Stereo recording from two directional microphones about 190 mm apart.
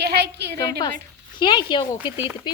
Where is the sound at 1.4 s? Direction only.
25° left (ahead or behind).